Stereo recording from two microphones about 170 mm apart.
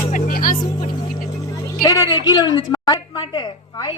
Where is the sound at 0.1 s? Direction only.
55° left (ahead or behind).